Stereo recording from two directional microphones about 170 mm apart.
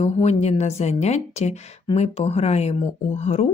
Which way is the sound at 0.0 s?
40° left (ahead or behind).